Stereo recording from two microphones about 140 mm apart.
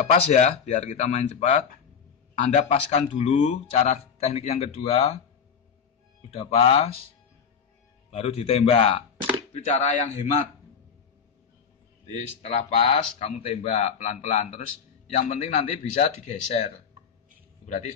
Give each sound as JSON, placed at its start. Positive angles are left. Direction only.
{"t": 0.3, "sound": "speech", "side_deg": 55}
{"t": 6.3, "sound": "speech", "side_deg": 40}
{"t": 8.1, "sound": "speech", "side_deg": 45}
{"t": 9.5, "sound": "speech", "side_deg": 60}
{"t": 12.4, "sound": "speech", "side_deg": 55}